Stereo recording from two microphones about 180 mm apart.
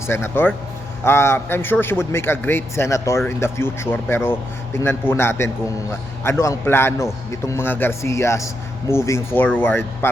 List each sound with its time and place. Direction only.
0.1 s a man's voice: 15° left (ahead or behind)